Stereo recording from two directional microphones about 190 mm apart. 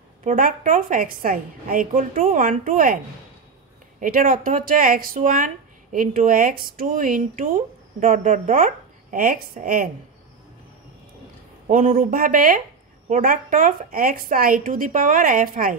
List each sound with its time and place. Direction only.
0.2 s speech: 45° right (ahead or behind)
4.0 s speech: 45° right (ahead or behind)
11.6 s speech: 45° right (ahead or behind)